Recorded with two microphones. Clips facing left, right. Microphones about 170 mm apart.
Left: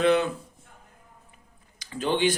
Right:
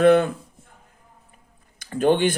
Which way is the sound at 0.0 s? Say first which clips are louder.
Right 6 dB; 55° right (ahead or behind).